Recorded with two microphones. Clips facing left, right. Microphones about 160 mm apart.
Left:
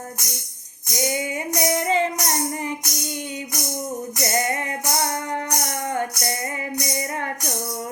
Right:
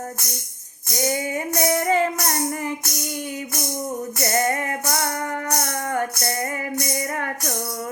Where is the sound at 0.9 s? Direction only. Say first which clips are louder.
Right 1 dB; 15° left (ahead or behind).